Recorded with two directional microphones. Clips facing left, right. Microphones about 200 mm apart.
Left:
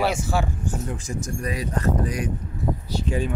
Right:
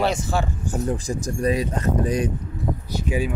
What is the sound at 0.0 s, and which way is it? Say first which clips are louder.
Speech: right 1 dB; 10° left (ahead or behind).